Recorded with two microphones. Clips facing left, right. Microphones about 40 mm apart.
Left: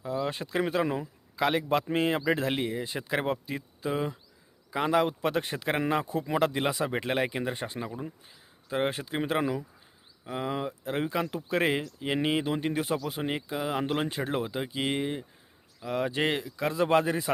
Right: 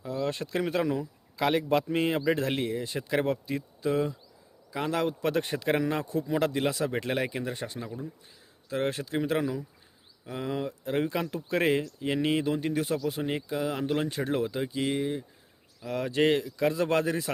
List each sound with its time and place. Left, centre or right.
0.0 s speech: centre; by 8.0 s left
8.7 s speech: centre
14.1 s speech: centre
14.8 s speech: left
15.8 s speech: centre